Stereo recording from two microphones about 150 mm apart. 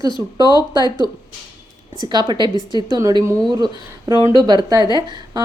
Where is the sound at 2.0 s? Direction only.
30° right (ahead or behind).